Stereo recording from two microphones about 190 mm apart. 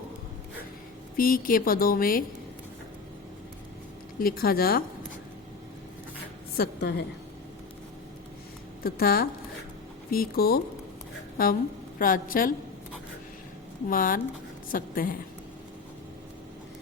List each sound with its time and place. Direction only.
1.1 s a woman's voice: 50° left (ahead or behind)
4.2 s a woman's voice: 50° left (ahead or behind)
6.6 s a woman's voice: 60° left (ahead or behind)
8.8 s a woman's voice: 50° left (ahead or behind)
13.9 s a woman's voice: 45° left (ahead or behind)